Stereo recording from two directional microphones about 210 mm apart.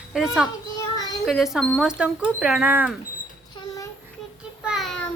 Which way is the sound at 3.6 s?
20° left (ahead or behind).